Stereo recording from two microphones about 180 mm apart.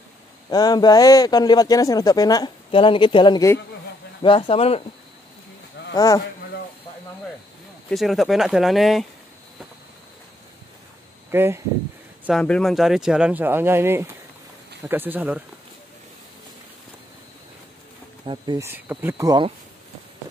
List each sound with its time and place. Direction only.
0.5 s a man's voice: 20° left (ahead or behind)
5.9 s a man's voice: 20° left (ahead or behind)
7.9 s speech: centre (ahead or behind)
11.3 s speech: 10° right (ahead or behind)
12.3 s speech: 5° left (ahead or behind)
18.2 s speech: 25° right (ahead or behind)
18.6 s speech: 10° right (ahead or behind)